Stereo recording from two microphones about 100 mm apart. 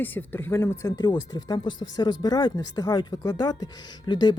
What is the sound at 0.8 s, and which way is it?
Speech, 45° left (ahead or behind).